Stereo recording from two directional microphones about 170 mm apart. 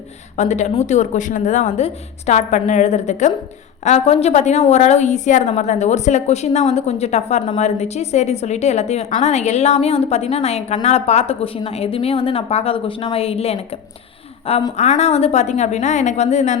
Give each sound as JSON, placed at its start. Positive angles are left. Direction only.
{"t": 0.3, "sound": "a woman's voice", "side_deg": 45}
{"t": 14.8, "sound": "a woman's voice", "side_deg": 40}